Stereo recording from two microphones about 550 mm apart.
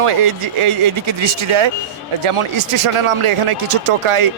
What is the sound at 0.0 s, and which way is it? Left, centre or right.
Speech, right.